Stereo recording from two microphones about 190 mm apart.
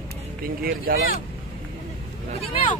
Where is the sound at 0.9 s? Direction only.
50° right (ahead or behind).